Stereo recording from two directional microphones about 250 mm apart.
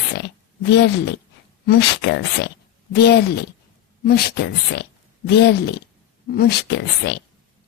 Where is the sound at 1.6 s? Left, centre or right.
Left.